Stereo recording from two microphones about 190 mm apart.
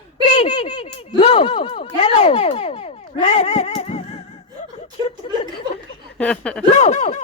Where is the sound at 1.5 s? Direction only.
30° left (ahead or behind).